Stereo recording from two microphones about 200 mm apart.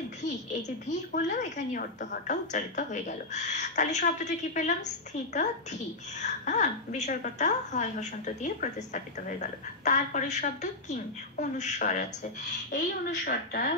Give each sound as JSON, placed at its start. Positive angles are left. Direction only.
{"t": 0.2, "sound": "a woman's voice", "side_deg": 35}
{"t": 13.1, "sound": "a woman's voice", "side_deg": 45}